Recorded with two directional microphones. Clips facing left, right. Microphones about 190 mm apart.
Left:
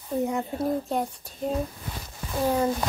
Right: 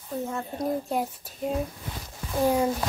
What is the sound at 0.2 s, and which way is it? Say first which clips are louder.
Speech: left 4 dB; 15° left (ahead or behind).